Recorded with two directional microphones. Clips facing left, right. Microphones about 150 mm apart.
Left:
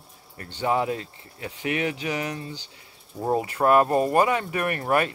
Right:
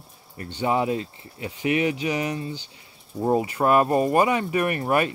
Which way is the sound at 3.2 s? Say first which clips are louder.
Right 2 dB; 5° right (ahead or behind).